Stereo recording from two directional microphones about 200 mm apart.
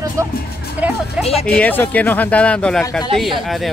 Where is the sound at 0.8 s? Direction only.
10° right (ahead or behind).